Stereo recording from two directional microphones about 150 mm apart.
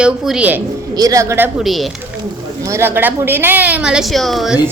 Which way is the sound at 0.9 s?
25° right (ahead or behind).